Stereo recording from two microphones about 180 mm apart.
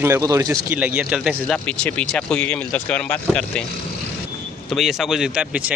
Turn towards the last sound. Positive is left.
turn(degrees=-5)  # may be behind; listen again after turning